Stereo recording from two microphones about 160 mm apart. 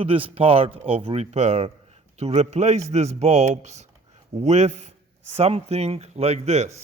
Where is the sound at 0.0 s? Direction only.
35° right (ahead or behind).